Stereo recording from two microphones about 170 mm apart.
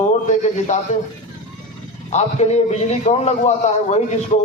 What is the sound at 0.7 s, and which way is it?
Speech, 45° left (ahead or behind).